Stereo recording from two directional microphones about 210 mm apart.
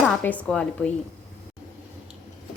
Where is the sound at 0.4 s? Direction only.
5° left (ahead or behind).